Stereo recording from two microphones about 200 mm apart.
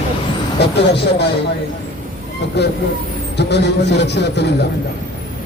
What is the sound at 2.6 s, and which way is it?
A man's voice, 55° left (ahead or behind).